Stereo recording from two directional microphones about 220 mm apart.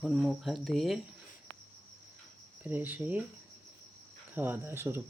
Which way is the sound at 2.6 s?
10° right (ahead or behind).